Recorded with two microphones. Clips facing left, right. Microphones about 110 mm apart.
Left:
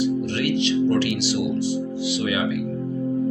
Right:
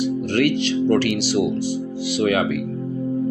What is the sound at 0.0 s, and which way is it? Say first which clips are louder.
Speech: right 3 dB; 45° right (ahead or behind).